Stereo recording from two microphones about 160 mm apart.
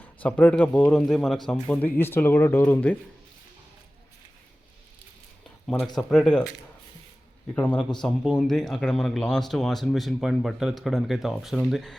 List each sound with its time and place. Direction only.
0.0 s speech: 10° left (ahead or behind)
6.0 s speech: 5° left (ahead or behind)
7.5 s speech: 10° left (ahead or behind)